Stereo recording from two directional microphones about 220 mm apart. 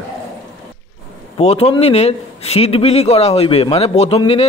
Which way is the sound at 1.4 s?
30° left (ahead or behind).